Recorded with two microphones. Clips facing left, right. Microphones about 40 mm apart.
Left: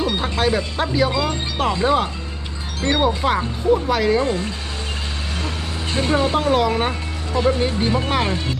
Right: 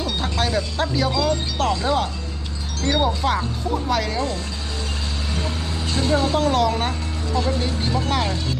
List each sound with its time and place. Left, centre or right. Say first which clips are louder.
0.0 s speech: left 4 dB; centre
4.2 s speech: left 4 dB; left
5.9 s speech: left 2 dB; left